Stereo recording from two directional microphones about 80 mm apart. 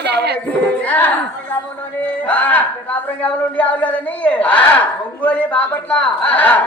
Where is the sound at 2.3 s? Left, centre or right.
Centre.